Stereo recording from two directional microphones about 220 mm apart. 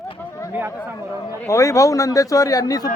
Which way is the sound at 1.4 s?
15° left (ahead or behind).